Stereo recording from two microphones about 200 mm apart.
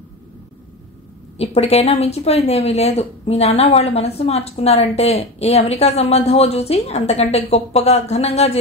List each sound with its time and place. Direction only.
1.4 s speech: 30° left (ahead or behind)